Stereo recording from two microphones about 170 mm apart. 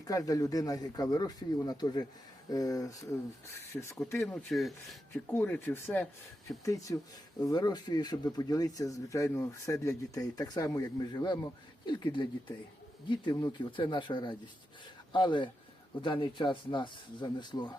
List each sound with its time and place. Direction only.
0.0 s speech: 20° left (ahead or behind)
4.5 s speech: centre (ahead or behind)
5.3 s speech: 10° left (ahead or behind)